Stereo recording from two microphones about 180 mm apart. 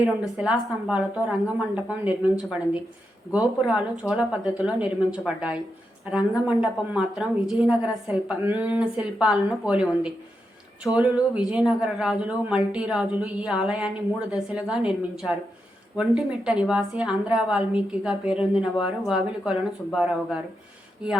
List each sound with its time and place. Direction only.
0.0 s a woman's voice: 5° right (ahead or behind)